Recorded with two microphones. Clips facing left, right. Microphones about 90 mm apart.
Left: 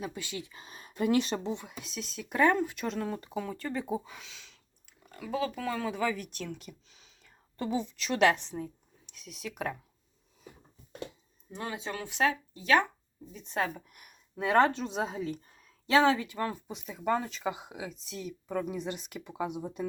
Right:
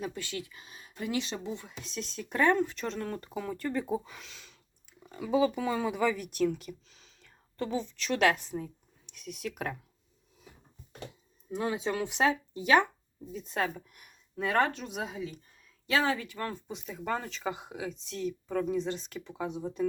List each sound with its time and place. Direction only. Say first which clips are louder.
0.1 s speech: right 1 dB; 15° left (ahead or behind)
0.6 s speech: left 7 dB; 45° left (ahead or behind)
1.8 s speech: right 2 dB; 5° left (ahead or behind)
5.0 s speech: right 6 dB; 15° right (ahead or behind); by 9.7 s centre (ahead or behind)
11.5 s speech: right 6 dB; 10° right (ahead or behind)
13.3 s speech: even; centre (ahead or behind)
14.3 s speech: left 3 dB; 20° left (ahead or behind)
16.6 s speech: left 3 dB; 5° left (ahead or behind)